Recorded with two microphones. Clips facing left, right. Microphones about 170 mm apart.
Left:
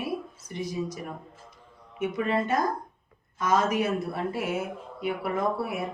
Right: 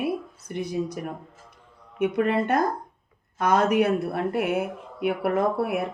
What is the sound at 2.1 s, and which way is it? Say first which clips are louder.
Speech: right 3 dB; 60° right (ahead or behind).